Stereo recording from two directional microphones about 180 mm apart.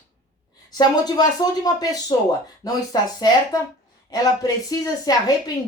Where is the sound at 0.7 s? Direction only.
25° left (ahead or behind).